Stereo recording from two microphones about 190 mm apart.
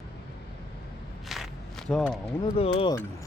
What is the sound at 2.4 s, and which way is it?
Speech, 25° left (ahead or behind).